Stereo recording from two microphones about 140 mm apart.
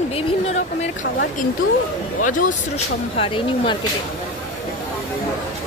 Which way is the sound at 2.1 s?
75° left (ahead or behind).